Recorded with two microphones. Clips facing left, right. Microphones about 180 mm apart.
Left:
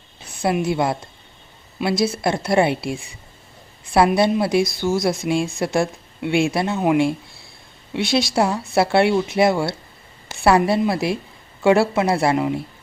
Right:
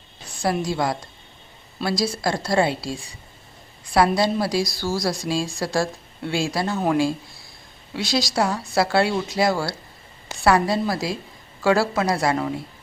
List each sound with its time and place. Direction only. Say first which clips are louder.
0.6 s speech: left 3 dB; 25° left (ahead or behind)
7.9 s speech: left 4 dB; 25° left (ahead or behind)